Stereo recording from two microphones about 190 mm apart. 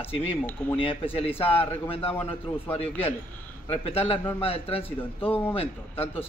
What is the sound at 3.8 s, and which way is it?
A man's voice, 30° left (ahead or behind).